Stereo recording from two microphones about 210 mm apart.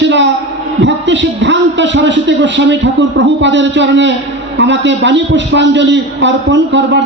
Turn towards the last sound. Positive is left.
turn(degrees=-60)  # may be behind; listen again after turning